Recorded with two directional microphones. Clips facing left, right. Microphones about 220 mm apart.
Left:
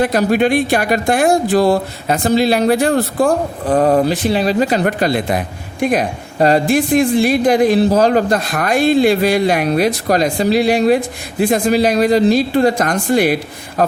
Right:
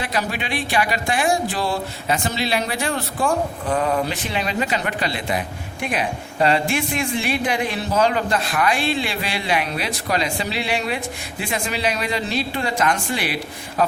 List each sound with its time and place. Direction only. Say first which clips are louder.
0.0 s speech: left 12 dB; 45° left (ahead or behind)
2.9 s speech: left 8 dB; 35° left (ahead or behind)